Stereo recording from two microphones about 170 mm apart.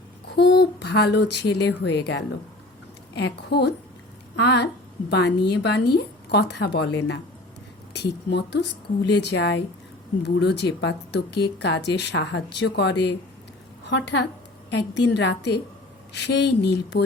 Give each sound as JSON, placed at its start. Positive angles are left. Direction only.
{"t": 0.3, "sound": "a woman's voice", "side_deg": 85}
{"t": 3.2, "sound": "a woman's voice", "side_deg": 80}
{"t": 5.1, "sound": "a woman's voice", "side_deg": 80}